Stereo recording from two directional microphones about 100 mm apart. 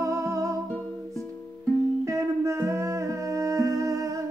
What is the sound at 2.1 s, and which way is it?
Music, 30° right (ahead or behind).